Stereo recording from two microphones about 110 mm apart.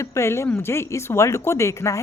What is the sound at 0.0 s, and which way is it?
Speech, 25° left (ahead or behind).